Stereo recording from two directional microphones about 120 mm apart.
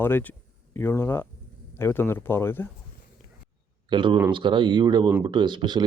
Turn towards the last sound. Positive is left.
turn(degrees=-40)  # may be behind; listen again after turning